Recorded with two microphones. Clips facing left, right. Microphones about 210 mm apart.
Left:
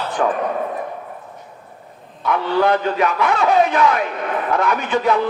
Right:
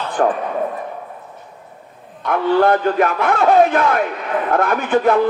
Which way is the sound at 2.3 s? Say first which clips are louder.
Right 3 dB; 50° right (ahead or behind).